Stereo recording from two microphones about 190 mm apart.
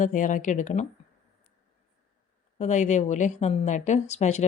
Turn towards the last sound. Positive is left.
turn(degrees=35)  # may be behind; listen again after turning